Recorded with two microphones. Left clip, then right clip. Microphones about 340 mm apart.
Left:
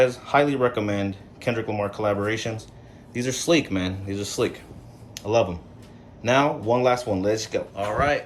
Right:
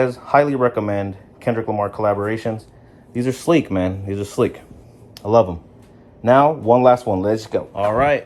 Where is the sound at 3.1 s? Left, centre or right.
Centre.